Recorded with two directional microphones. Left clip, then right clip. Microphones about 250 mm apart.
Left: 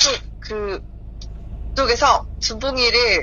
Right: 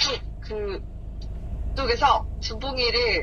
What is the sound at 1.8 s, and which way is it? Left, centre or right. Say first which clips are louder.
Speech: left 5 dB; left.